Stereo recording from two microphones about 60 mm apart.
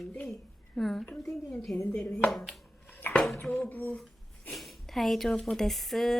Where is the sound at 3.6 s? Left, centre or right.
Left.